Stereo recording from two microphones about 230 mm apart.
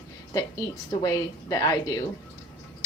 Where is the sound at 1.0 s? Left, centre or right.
Centre.